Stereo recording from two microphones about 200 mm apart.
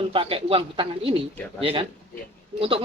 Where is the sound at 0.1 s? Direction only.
25° right (ahead or behind).